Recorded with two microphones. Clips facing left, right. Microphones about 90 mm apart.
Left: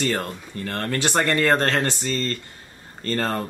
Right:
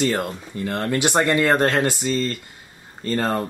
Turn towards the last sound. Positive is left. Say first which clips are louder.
# right 2 dB
turn(degrees=-15)  # may be behind; listen again after turning